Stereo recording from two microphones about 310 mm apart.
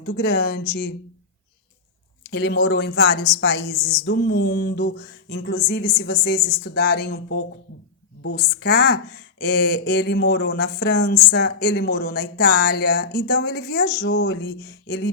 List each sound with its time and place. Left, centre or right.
0.0 s speech: left
2.2 s speech: left